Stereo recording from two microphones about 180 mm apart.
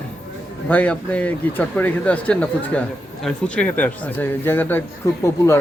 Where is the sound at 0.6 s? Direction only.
10° left (ahead or behind).